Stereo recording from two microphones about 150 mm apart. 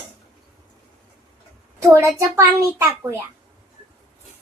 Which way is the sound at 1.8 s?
20° right (ahead or behind).